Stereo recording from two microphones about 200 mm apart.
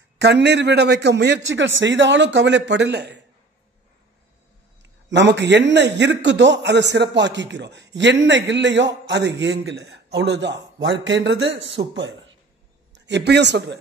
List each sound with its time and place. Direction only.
0.2 s a man's voice: 55° right (ahead or behind)
5.1 s a man's voice: 60° right (ahead or behind)